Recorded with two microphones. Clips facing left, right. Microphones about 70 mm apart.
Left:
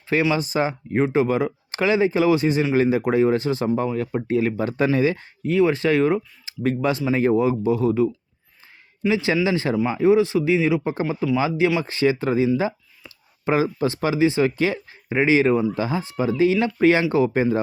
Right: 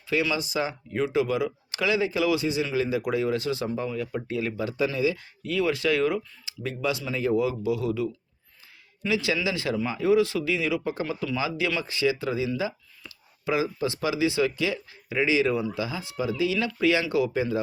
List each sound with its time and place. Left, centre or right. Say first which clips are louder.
0.1 s speech: left 5 dB; left
5.4 s speech: left 7 dB; left